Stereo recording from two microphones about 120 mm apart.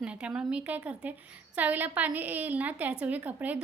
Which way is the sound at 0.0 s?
10° right (ahead or behind).